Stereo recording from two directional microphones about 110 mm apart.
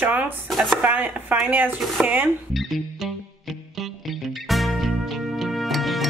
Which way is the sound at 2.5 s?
Centre (ahead or behind).